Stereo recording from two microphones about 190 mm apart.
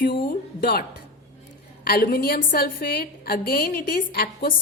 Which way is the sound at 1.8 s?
50° left (ahead or behind).